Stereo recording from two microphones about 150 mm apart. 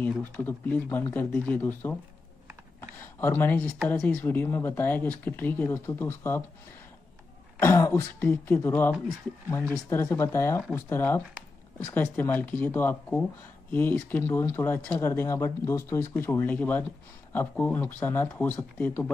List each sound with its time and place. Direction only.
0.0 s speech: 15° left (ahead or behind)
3.2 s speech: 15° left (ahead or behind)
7.5 s speech: 15° left (ahead or behind)